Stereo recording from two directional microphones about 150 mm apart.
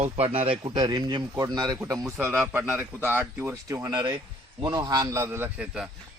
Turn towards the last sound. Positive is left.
turn(degrees=-15)  # may be behind; listen again after turning